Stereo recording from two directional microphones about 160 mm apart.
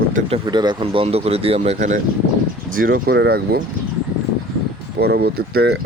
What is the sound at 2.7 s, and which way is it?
Speech, 65° right (ahead or behind).